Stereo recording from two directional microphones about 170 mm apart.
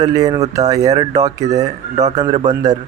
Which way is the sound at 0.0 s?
20° right (ahead or behind).